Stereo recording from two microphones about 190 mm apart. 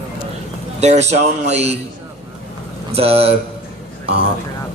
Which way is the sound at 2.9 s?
30° right (ahead or behind).